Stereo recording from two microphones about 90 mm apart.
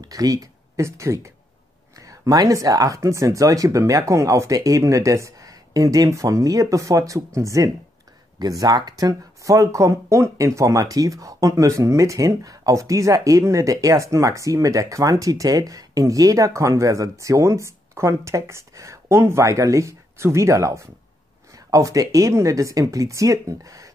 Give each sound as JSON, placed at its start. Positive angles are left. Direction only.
{"t": 0.0, "sound": "speech", "side_deg": -40}
{"t": 8.4, "sound": "speech", "side_deg": -45}